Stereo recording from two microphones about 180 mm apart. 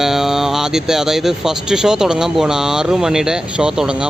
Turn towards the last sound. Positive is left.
turn(degrees=-5)  # may be behind; listen again after turning